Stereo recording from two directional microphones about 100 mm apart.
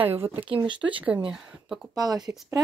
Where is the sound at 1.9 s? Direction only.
40° right (ahead or behind).